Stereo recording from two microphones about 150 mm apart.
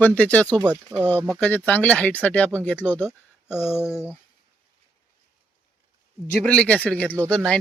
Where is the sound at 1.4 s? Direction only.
10° left (ahead or behind).